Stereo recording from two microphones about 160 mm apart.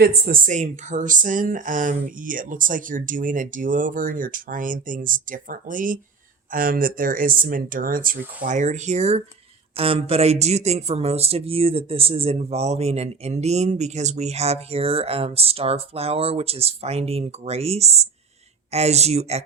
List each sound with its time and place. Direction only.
0.0 s speech: 60° right (ahead or behind); by 19.5 s 40° right (ahead or behind)